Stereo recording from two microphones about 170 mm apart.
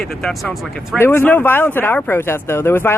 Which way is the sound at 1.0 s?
10° left (ahead or behind).